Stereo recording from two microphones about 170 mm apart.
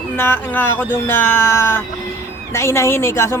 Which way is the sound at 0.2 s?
15° left (ahead or behind).